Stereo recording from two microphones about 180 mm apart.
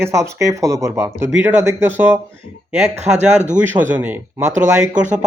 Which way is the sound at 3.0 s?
40° right (ahead or behind).